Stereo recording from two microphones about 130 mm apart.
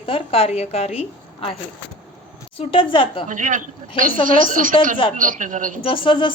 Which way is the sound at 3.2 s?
80° right.